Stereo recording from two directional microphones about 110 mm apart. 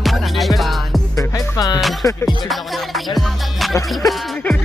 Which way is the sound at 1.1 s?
35° left (ahead or behind).